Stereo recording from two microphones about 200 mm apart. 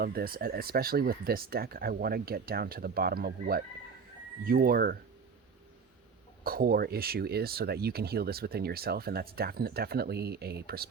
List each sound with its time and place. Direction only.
0.0 s speech: 50° right (ahead or behind)
6.4 s speech: 45° right (ahead or behind)